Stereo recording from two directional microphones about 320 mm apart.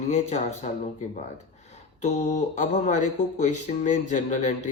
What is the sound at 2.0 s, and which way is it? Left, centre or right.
Speech, left.